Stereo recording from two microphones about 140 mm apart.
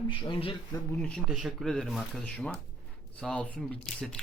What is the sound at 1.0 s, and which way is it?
Speech, 5° left (ahead or behind).